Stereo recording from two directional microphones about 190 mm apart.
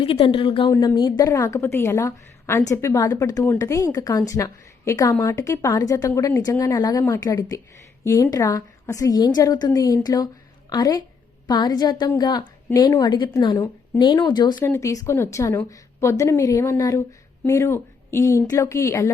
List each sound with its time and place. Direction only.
0.0 s a woman's voice: 30° left (ahead or behind)